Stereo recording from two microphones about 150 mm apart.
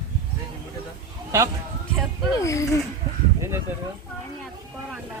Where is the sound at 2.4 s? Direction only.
20° left (ahead or behind).